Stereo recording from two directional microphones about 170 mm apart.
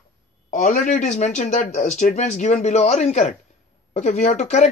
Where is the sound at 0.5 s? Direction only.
45° left (ahead or behind).